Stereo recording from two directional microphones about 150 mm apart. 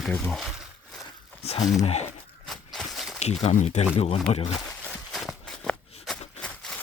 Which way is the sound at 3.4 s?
55° left (ahead or behind).